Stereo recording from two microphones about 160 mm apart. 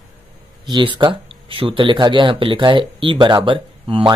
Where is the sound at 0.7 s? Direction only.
30° right (ahead or behind).